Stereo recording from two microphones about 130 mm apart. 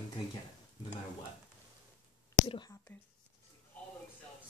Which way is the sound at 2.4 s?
45° left (ahead or behind).